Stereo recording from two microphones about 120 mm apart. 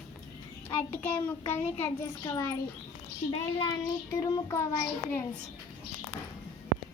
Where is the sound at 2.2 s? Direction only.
25° left (ahead or behind).